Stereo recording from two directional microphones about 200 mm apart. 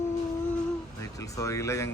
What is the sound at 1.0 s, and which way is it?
Speech, 15° left (ahead or behind).